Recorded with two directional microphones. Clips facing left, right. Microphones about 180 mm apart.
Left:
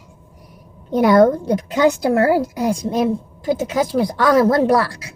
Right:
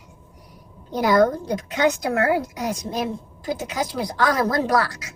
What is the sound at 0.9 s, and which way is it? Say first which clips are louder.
A woman's voice: left 5 dB; 25° left (ahead or behind).